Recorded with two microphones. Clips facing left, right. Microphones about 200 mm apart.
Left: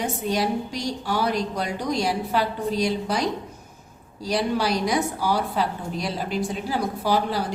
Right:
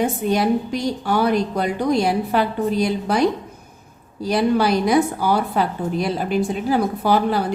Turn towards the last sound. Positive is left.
turn(degrees=-55)  # may be behind; listen again after turning